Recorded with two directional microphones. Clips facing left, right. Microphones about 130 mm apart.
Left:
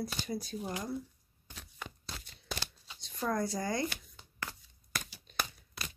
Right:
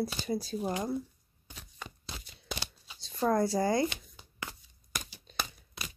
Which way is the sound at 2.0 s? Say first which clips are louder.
Right 4 dB; 5° right (ahead or behind).